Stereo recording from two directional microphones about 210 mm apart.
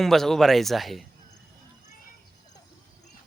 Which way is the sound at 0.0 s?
Centre (ahead or behind).